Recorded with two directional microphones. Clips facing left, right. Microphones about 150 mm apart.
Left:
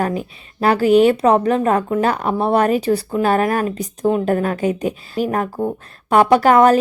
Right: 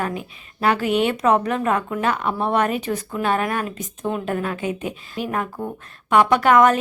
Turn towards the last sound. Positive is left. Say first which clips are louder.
# left 4 dB
turn(degrees=35)  # may be behind; listen again after turning